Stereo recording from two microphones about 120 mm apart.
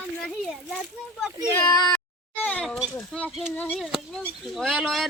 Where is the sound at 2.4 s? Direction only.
10° left (ahead or behind).